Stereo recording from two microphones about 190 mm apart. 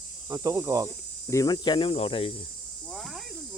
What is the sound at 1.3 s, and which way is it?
Cricket, 20° left (ahead or behind).